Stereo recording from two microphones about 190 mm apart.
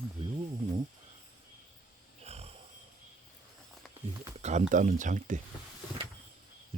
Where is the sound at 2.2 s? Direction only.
35° right (ahead or behind).